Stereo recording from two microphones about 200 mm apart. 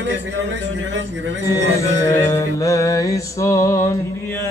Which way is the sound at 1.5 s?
15° left (ahead or behind).